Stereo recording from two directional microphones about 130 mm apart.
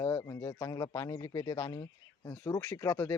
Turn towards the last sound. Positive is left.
turn(degrees=20)  # may be behind; listen again after turning